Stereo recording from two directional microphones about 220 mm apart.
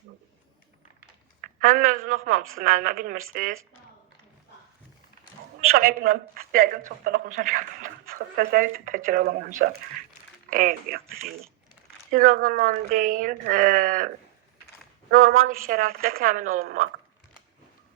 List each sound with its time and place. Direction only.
1.4 s a sound: 40° right (ahead or behind)
2.0 s speech: 40° right (ahead or behind)
5.5 s speech: 40° right (ahead or behind)
10.5 s speech: 35° right (ahead or behind)
12.1 s speech: 35° right (ahead or behind)
15.1 s speech: 70° right (ahead or behind)
15.4 s speech: 40° right (ahead or behind)